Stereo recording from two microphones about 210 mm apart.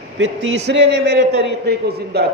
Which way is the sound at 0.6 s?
55° right (ahead or behind).